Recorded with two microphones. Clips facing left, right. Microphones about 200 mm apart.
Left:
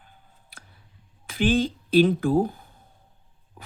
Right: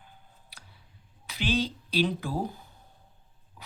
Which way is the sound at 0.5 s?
50° left (ahead or behind).